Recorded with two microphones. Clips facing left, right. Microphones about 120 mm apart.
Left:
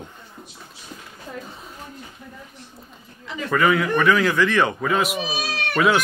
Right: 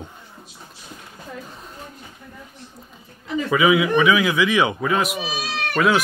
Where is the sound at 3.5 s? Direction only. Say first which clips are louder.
Right 2 dB; 5° right (ahead or behind).